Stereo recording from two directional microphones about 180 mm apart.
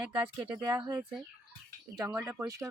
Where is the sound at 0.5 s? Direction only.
25° right (ahead or behind).